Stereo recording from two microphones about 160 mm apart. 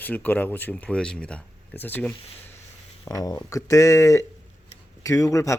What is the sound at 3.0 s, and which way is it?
Speech, 20° left (ahead or behind).